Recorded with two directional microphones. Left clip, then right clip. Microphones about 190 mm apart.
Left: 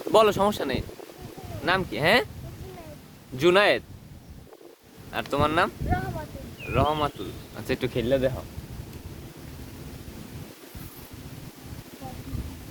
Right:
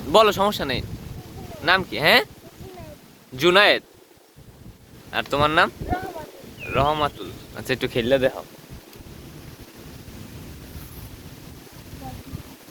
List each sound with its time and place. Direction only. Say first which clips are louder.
0.1 s speech: right 3 dB; 10° left (ahead or behind)
3.3 s speech: right 4 dB; 10° left (ahead or behind)
5.1 s speech: right 5 dB; centre (ahead or behind)
7.9 s speech: right 5 dB; 15° right (ahead or behind)